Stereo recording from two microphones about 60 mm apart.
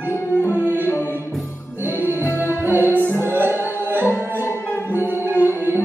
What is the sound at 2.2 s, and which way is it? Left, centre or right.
Music, left.